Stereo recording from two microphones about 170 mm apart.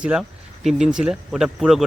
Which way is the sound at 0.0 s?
5° right (ahead or behind).